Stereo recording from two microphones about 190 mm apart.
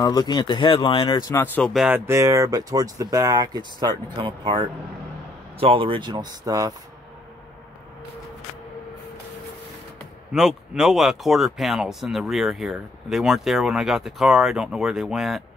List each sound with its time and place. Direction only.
0.0 s speech: 20° left (ahead or behind)
1.3 s speech: 10° left (ahead or behind)
1.9 s speech: 10° right (ahead or behind)
10.3 s speech: 5° right (ahead or behind)